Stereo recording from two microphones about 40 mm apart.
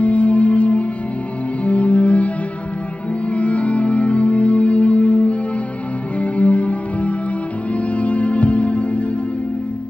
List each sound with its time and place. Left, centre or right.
0.0 s music: left